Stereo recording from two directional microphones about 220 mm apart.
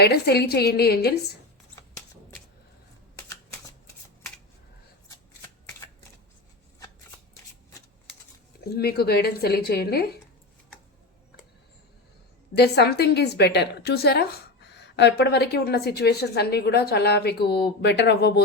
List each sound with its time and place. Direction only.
0.0 s a woman's voice: 45° left (ahead or behind)
1.7 s shuffling cards: 10° left (ahead or behind)
8.7 s a woman's voice: 45° left (ahead or behind)
12.5 s a woman's voice: 45° left (ahead or behind)